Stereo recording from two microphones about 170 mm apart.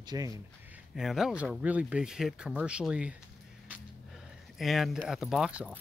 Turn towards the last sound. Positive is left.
turn(degrees=-5)  # may be behind; listen again after turning